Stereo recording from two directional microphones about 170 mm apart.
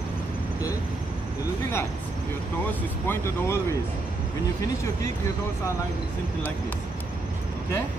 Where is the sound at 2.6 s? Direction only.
15° left (ahead or behind).